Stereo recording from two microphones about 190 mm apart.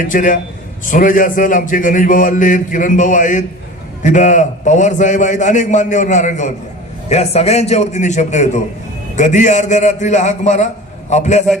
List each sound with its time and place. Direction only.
0.0 s mantra: 45° left (ahead or behind)
4.0 s a man's voice: 40° left (ahead or behind)